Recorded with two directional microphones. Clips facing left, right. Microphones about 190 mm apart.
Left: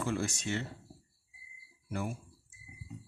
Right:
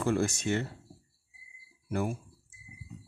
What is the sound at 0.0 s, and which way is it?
Speech, 50° right (ahead or behind).